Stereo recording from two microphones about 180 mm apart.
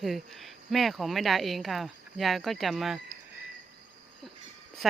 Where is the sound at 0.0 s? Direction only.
Centre (ahead or behind).